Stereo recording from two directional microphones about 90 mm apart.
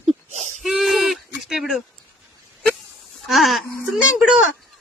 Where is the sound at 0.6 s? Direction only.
Centre (ahead or behind).